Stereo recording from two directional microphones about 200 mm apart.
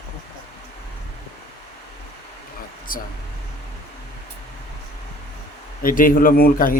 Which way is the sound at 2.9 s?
45° left (ahead or behind).